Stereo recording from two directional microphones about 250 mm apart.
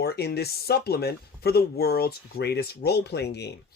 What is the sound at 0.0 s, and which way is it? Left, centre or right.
Speech, left.